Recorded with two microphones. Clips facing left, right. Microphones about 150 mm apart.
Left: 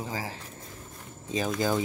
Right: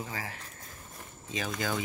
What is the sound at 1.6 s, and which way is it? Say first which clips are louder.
Speech: left 6 dB; 35° left (ahead or behind).